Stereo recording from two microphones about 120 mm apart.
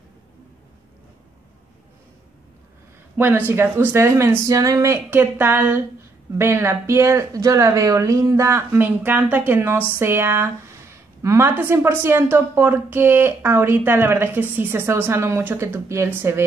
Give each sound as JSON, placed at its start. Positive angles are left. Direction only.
{"t": 3.2, "sound": "speech", "side_deg": -15}